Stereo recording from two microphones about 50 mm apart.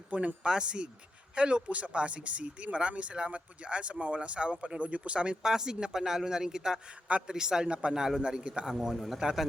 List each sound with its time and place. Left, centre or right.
0.1 s speech: right
7.9 s speech: centre
8.7 s a man's voice: centre